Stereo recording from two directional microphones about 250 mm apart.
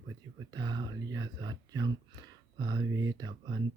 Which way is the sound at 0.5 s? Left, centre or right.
Centre.